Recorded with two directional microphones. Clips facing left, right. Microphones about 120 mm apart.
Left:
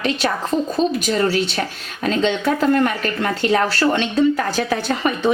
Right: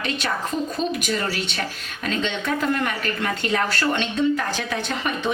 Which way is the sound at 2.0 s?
40° left (ahead or behind).